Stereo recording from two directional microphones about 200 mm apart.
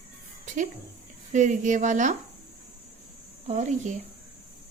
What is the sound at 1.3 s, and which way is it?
Speech, 40° right (ahead or behind).